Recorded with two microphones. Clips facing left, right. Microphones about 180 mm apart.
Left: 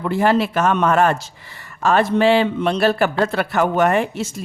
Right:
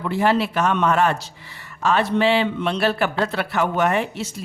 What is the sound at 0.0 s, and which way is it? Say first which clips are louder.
A man's voice: left 3 dB; 45° left (ahead or behind).